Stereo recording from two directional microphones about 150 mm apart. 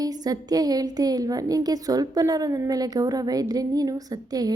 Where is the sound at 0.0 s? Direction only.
25° right (ahead or behind).